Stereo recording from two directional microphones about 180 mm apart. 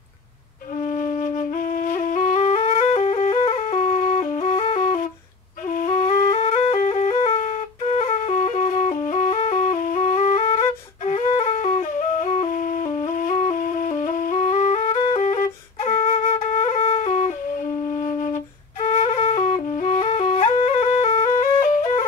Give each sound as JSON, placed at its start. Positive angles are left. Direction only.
{"t": 0.8, "sound": "flute", "side_deg": 45}
{"t": 6.3, "sound": "flute", "side_deg": 35}
{"t": 8.0, "sound": "music", "side_deg": 35}
{"t": 16.6, "sound": "flute", "side_deg": 35}
{"t": 17.9, "sound": "music", "side_deg": 45}
{"t": 18.8, "sound": "flute", "side_deg": 35}